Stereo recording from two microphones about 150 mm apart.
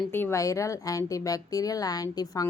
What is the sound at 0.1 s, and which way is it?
A woman's voice, 15° left (ahead or behind).